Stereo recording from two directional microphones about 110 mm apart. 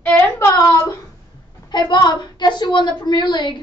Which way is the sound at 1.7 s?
40° left (ahead or behind).